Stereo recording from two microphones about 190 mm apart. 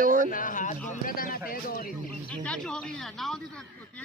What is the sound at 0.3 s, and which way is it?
A man's voice, 45° left (ahead or behind).